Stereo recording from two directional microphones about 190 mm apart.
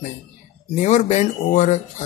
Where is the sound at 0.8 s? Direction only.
40° left (ahead or behind).